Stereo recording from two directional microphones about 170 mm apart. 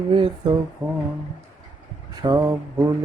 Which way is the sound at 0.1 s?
30° right (ahead or behind).